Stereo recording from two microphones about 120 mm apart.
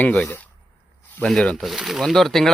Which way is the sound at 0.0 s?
10° left (ahead or behind).